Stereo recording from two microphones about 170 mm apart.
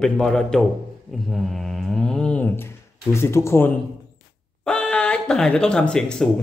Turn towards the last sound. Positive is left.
turn(degrees=5)  # may be behind; listen again after turning